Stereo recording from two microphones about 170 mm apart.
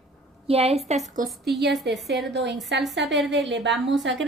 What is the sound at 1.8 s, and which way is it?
A woman's voice, 90° right.